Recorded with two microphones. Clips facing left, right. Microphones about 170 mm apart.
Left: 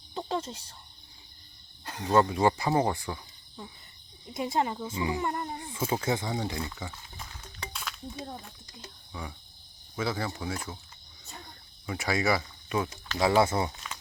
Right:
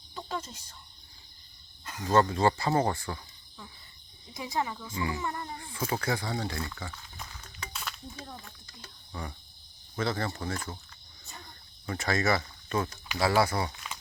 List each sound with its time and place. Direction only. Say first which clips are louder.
0.1 s speech: left 5 dB; 30° left (ahead or behind)
1.8 s cricket: left 2 dB; 30° left (ahead or behind)
2.0 s speech: left 1 dB; 15° left (ahead or behind)
4.4 s speech: left 4 dB; 25° left (ahead or behind)
7.7 s a sound: right 1 dB; centre (ahead or behind)
8.1 s speech: left 5 dB; 30° left (ahead or behind)
9.9 s speech: even; 5° left (ahead or behind)
11.9 s speech: even; 10° left (ahead or behind)